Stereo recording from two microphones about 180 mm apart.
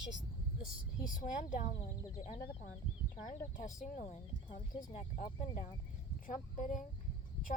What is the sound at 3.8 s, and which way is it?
A woman's voice, 45° left (ahead or behind).